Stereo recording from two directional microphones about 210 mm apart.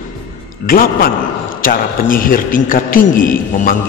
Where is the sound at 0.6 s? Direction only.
45° left (ahead or behind).